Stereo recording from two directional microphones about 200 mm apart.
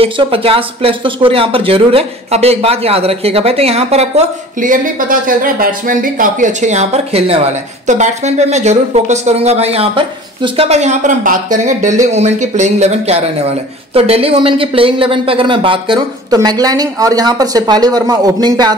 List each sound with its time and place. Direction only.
0.0 s speech: 30° right (ahead or behind)